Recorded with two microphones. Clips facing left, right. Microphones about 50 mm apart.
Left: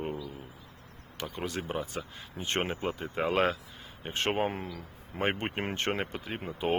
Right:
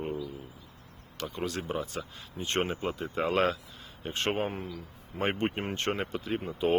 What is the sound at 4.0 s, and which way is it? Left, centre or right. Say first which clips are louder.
Speech: even; centre.